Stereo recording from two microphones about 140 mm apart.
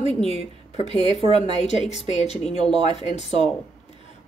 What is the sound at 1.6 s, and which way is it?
A woman's voice, 50° left (ahead or behind).